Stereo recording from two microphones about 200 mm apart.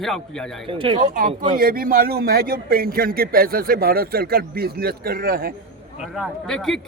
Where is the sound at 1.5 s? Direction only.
45° right (ahead or behind).